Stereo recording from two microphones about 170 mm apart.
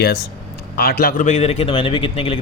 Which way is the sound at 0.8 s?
65° left (ahead or behind).